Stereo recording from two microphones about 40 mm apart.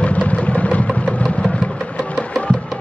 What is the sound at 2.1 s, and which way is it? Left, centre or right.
Music, left.